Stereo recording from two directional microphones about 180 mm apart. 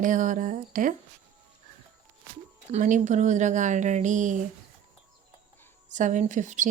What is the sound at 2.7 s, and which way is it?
Speech, 45° right (ahead or behind).